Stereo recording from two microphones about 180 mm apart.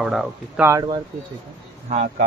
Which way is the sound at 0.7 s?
20° right (ahead or behind).